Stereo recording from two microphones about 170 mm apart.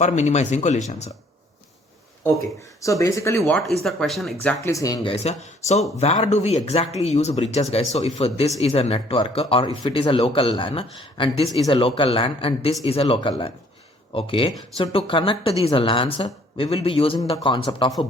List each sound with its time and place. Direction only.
0.0 s speech: 40° left (ahead or behind)
2.8 s speech: 20° left (ahead or behind)
3.4 s speech: centre (ahead or behind)
4.6 s speech: 20° left (ahead or behind)
5.0 s speech: 40° left (ahead or behind)